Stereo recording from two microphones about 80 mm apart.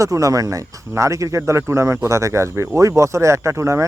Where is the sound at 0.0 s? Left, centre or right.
Right.